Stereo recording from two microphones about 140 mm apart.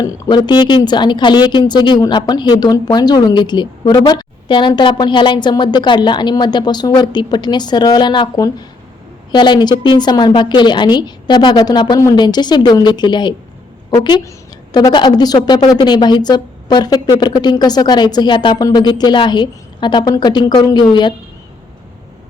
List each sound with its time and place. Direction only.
0.0 s a woman's voice: 30° left (ahead or behind)